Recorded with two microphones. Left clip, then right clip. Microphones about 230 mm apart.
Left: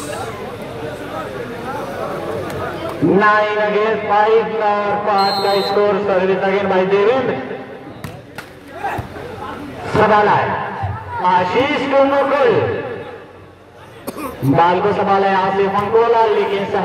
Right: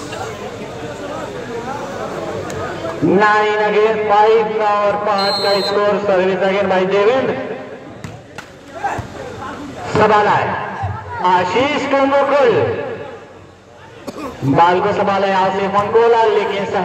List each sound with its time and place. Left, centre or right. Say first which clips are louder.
3.2 s a man's voice: right 1 dB; right
9.9 s a man's voice: even; right
14.6 s a man's voice: right 2 dB; right